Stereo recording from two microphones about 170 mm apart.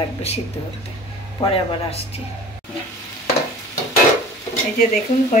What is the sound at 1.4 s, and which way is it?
Speech, 35° left (ahead or behind).